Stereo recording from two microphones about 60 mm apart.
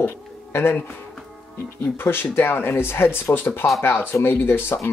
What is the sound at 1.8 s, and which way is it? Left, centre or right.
Speech, left.